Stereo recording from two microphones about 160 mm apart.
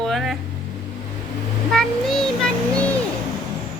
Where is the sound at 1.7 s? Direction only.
5° left (ahead or behind).